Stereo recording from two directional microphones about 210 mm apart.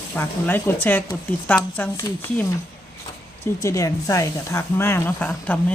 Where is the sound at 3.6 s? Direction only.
15° left (ahead or behind).